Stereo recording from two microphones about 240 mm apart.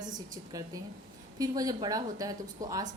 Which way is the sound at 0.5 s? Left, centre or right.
Centre.